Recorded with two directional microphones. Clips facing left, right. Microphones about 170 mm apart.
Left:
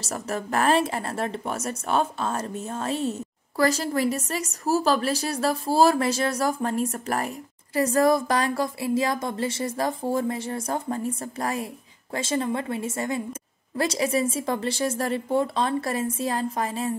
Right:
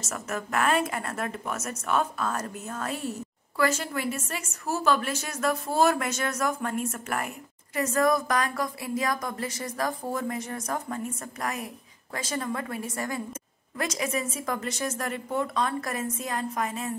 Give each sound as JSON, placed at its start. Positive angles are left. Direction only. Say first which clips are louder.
{"t": 0.0, "sound": "a woman's voice", "louder": "left 3 dB", "side_deg": 35}
{"t": 3.5, "sound": "a woman's voice", "louder": "left 4 dB", "side_deg": 35}